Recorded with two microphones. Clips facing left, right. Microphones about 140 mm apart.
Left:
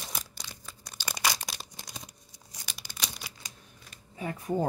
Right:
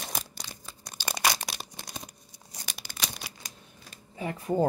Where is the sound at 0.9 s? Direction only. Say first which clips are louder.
Right 3 dB; 55° right (ahead or behind).